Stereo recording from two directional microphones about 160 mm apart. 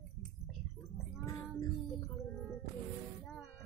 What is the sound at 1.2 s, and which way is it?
Child singing, 20° left (ahead or behind).